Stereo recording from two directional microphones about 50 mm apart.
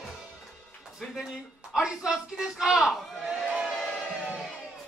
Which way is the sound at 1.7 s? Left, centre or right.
Centre.